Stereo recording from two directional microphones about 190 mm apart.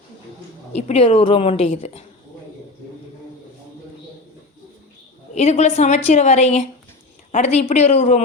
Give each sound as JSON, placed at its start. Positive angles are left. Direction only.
{"t": 0.8, "sound": "a woman's voice", "side_deg": 35}
{"t": 5.3, "sound": "a woman's voice", "side_deg": 35}